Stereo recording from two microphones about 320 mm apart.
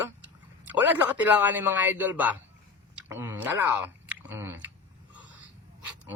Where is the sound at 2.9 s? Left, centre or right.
Centre.